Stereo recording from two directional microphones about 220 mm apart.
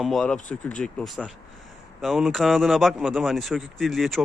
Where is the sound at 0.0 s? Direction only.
Centre (ahead or behind).